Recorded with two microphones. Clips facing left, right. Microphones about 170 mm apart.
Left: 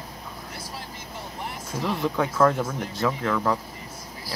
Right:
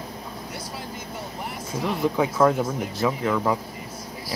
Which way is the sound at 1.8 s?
5° right (ahead or behind).